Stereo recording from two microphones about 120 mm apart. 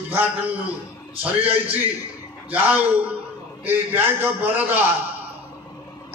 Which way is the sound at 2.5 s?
15° right (ahead or behind).